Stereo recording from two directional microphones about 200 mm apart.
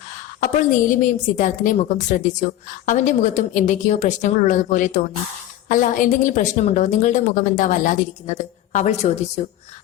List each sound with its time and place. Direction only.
0.3 s a woman's voice: 40° left (ahead or behind)